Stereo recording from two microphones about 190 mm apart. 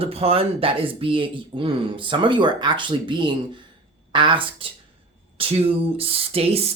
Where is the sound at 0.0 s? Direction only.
30° right (ahead or behind).